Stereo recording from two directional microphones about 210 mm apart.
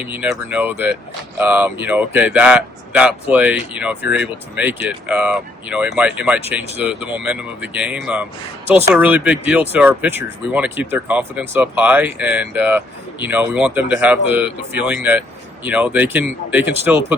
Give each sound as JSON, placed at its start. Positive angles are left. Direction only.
{"t": 0.0, "sound": "speech", "side_deg": -5}